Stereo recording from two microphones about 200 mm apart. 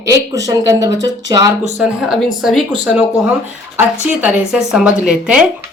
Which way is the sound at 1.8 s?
Centre (ahead or behind).